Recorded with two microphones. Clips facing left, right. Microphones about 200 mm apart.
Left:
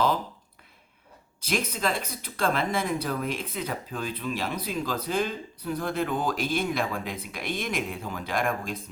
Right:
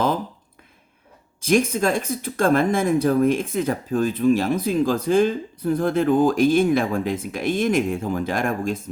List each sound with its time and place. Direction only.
1.4 s speech: 50° right (ahead or behind)